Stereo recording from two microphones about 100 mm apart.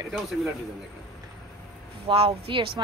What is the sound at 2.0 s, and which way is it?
Speech, 65° right (ahead or behind).